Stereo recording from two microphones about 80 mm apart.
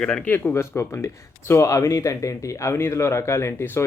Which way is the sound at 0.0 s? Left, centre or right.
Centre.